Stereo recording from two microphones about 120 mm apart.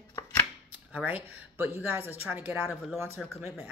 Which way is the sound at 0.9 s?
15° right (ahead or behind).